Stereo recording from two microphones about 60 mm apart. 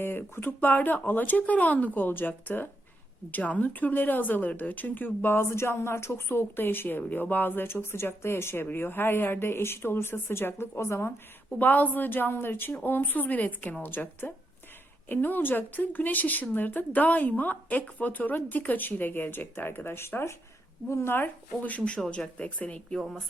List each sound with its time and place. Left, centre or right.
0.0 s speech: left
11.6 s speech: left
21.6 s speech: left